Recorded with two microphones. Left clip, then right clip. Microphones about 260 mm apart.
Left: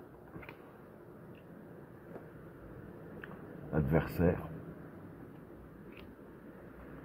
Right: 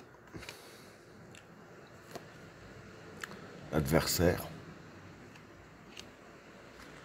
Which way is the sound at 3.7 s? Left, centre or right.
Right.